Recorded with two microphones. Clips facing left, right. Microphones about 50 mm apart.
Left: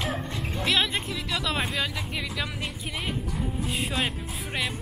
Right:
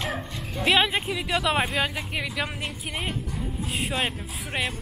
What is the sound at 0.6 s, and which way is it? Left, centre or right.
Speech, centre.